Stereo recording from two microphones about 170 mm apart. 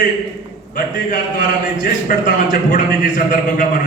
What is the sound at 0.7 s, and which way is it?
A man's voice, 50° left (ahead or behind).